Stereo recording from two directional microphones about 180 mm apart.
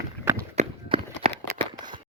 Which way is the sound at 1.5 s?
25° right (ahead or behind).